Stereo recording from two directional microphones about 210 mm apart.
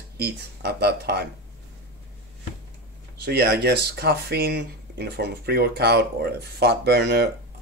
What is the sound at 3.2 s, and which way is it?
Speech, 50° right (ahead or behind).